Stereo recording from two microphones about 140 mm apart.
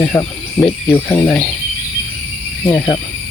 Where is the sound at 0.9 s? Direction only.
15° left (ahead or behind).